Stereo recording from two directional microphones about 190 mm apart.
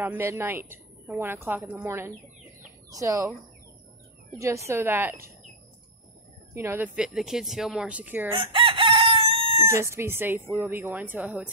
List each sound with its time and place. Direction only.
0.0 s a woman's voice: 10° right (ahead or behind)
4.4 s a woman's voice: 15° right (ahead or behind)
6.5 s a woman's voice: 15° right (ahead or behind)
8.3 s chicken: 25° right (ahead or behind)
9.6 s a woman's voice: 15° right (ahead or behind)